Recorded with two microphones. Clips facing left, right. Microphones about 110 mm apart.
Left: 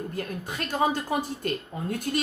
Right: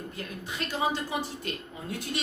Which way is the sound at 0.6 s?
50° left (ahead or behind).